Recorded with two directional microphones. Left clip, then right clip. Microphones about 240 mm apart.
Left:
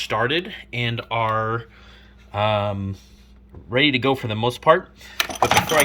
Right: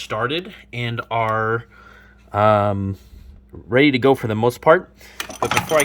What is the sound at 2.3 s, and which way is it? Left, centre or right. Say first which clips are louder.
Speech: right 6 dB; right.